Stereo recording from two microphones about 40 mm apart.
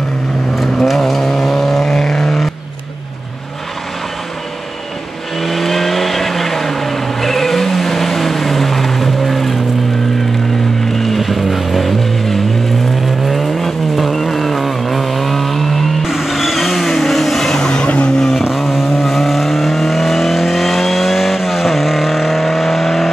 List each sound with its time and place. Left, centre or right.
0.6 s vehicle: centre
5.4 s vehicle: centre
10.9 s vehicle: centre
17.6 s vehicle: left
18.4 s vehicle: centre